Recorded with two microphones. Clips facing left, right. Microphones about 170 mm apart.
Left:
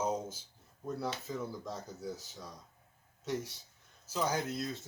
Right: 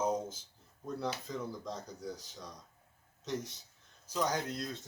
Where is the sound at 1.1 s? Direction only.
5° left (ahead or behind).